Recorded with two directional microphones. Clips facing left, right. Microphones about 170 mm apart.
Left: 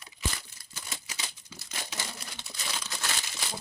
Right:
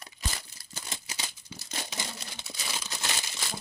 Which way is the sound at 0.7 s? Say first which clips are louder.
Right 2 dB; 25° right (ahead or behind).